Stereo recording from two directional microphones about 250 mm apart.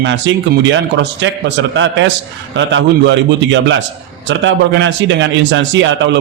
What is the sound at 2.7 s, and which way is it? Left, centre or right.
A man's voice, right.